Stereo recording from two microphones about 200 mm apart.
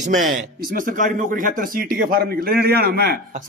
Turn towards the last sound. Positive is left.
turn(degrees=-50)  # may be behind; listen again after turning